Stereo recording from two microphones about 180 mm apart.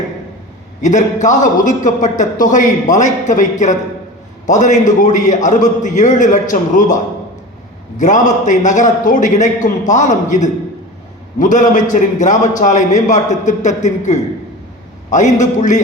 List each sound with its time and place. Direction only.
0.8 s a man's voice: 45° left (ahead or behind)